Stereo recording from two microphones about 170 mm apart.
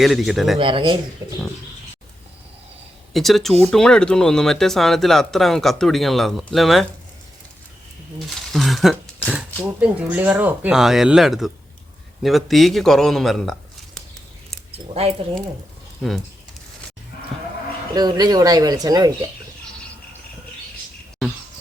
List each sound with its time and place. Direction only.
0.0 s speech: centre (ahead or behind)
0.6 s speech: 30° right (ahead or behind)
3.1 s speech: centre (ahead or behind)
8.5 s speech: centre (ahead or behind)
14.7 s speech: 35° right (ahead or behind)
16.0 s speech: centre (ahead or behind)
17.9 s speech: 25° right (ahead or behind)